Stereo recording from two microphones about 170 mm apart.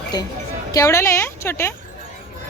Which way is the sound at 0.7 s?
20° left (ahead or behind).